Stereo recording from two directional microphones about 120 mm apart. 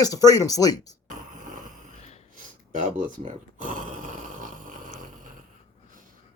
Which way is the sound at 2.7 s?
90° right.